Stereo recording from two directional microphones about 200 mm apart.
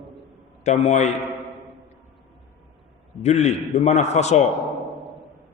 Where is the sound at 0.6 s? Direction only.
35° left (ahead or behind).